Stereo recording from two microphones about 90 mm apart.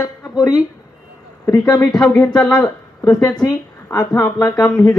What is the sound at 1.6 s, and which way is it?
Speech, 35° left (ahead or behind).